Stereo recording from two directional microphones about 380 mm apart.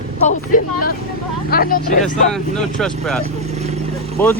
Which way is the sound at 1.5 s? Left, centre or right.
Left.